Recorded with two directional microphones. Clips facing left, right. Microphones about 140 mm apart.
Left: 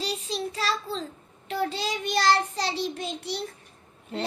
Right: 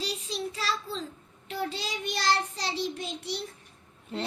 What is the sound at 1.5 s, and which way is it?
Child singing, 75° left (ahead or behind).